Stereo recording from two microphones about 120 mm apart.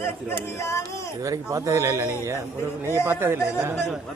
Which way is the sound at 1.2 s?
25° right (ahead or behind).